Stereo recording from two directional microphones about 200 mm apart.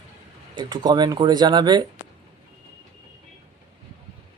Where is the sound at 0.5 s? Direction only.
20° right (ahead or behind).